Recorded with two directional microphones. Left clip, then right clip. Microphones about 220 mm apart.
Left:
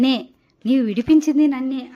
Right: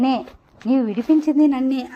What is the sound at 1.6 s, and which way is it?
Speech, 25° right (ahead or behind).